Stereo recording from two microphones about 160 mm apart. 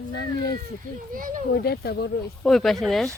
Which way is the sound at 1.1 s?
60° right (ahead or behind).